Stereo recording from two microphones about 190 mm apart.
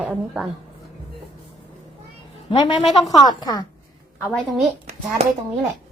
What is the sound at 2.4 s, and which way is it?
A woman's voice, 25° left (ahead or behind).